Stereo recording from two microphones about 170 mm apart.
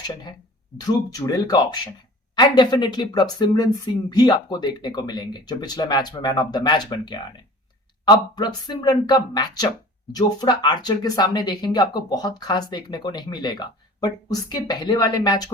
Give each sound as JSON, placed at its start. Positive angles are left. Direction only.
{"t": 0.9, "sound": "speech", "side_deg": 20}